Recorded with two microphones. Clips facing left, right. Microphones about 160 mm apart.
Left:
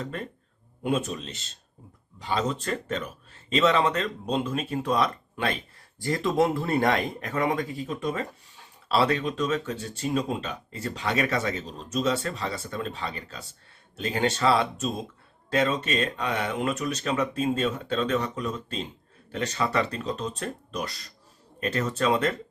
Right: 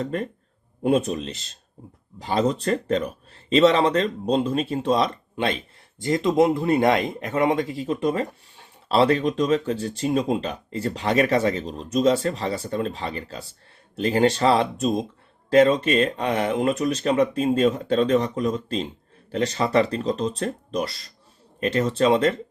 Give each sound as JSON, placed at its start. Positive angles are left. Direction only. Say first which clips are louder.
{"t": 0.8, "sound": "speech", "louder": "right 6 dB", "side_deg": -35}